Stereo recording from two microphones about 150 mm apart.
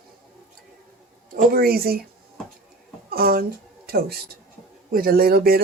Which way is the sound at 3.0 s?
85° right.